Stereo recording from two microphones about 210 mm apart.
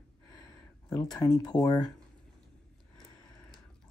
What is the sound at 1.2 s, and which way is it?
Speech, 20° left (ahead or behind).